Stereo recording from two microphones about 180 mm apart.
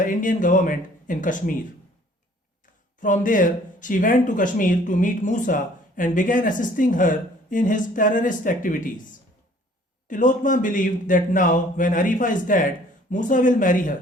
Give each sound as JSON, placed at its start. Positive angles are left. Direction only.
{"t": 0.0, "sound": "speech", "side_deg": 45}
{"t": 3.0, "sound": "speech", "side_deg": 45}
{"t": 10.1, "sound": "speech", "side_deg": 45}